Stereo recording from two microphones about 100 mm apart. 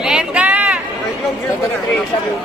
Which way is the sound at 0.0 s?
5° right (ahead or behind).